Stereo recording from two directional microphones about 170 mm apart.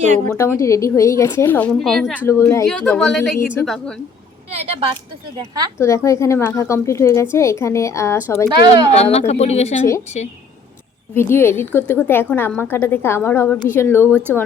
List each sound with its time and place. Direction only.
0.3 s a woman's voice: 15° left (ahead or behind); by 2.2 s centre (ahead or behind)
2.2 s a woman's voice: 15° left (ahead or behind)
2.6 s speech: 5° left (ahead or behind)
4.5 s a woman's voice: 35° right (ahead or behind)
5.8 s a woman's voice: 15° left (ahead or behind)
8.4 s a woman's voice: 25° right (ahead or behind)
9.0 s speech: 40° left (ahead or behind)
11.1 s a woman's voice: 15° left (ahead or behind)